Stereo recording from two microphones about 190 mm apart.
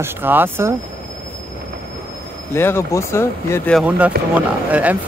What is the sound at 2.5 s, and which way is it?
Speech, 15° left (ahead or behind).